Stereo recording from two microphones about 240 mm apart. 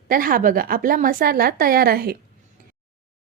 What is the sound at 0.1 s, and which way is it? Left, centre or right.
A woman's voice, right.